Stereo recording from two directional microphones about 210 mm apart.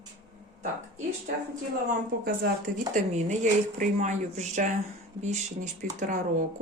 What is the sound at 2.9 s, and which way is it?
Speech, 35° right (ahead or behind).